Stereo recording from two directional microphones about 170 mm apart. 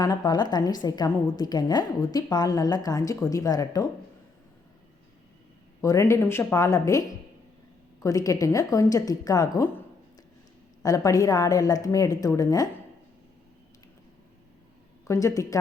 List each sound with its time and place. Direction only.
0.0 s a woman's voice: 20° left (ahead or behind)
5.8 s speech: 20° left (ahead or behind)
8.0 s a woman's voice: 20° left (ahead or behind)
10.8 s a woman's voice: 20° left (ahead or behind)
15.0 s a woman's voice: 20° left (ahead or behind)